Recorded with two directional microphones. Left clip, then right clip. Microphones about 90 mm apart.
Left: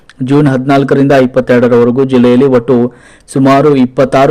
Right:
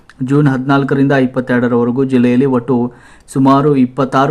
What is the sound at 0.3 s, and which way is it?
A man's voice, 25° left (ahead or behind).